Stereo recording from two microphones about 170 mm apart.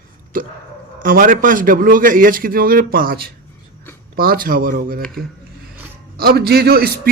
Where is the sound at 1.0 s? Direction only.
55° right (ahead or behind).